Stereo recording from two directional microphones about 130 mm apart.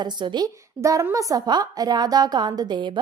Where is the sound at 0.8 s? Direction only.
25° right (ahead or behind).